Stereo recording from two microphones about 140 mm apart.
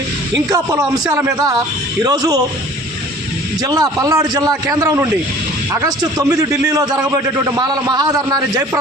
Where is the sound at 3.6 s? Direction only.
25° right (ahead or behind).